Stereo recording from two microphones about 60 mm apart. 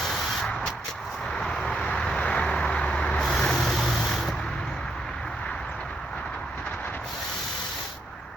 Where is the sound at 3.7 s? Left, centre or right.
Centre.